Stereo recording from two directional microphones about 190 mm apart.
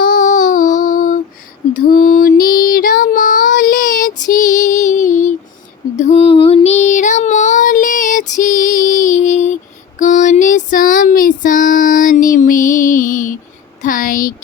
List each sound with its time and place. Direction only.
0.0 s child singing: 45° left (ahead or behind)
1.7 s female singing: 45° left (ahead or behind)
10.0 s a sound: 40° left (ahead or behind)